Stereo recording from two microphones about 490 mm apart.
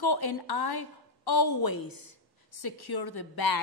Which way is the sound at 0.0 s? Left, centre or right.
Left.